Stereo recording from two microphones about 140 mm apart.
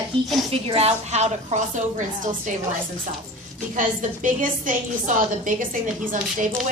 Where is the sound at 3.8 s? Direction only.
70° right (ahead or behind).